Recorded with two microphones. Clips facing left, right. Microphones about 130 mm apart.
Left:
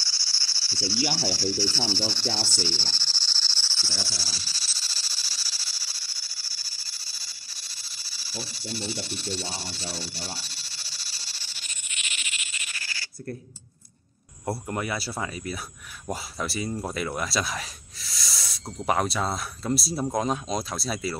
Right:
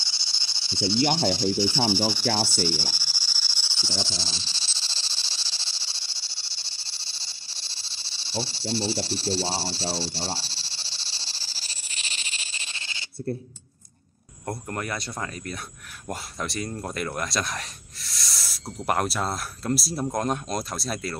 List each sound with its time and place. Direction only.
0.0 s cricket: 20° right (ahead or behind)
1.3 s speech: 20° right (ahead or behind)
2.4 s a sound: 15° right (ahead or behind)
14.4 s speech: 10° left (ahead or behind)